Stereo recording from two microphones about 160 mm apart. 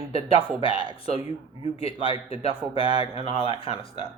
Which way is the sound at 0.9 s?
35° left (ahead or behind).